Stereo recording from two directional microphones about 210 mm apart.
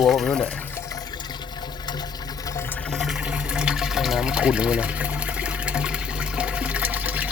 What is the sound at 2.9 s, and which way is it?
Water, centre (ahead or behind).